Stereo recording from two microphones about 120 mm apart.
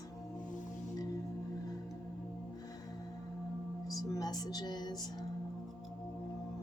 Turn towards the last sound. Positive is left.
turn(degrees=35)  # may be behind; listen again after turning